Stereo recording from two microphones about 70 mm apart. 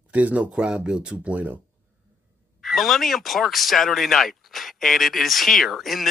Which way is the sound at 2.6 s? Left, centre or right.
Centre.